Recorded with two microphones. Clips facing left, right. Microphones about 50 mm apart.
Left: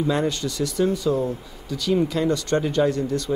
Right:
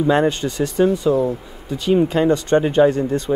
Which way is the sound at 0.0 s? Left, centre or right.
Right.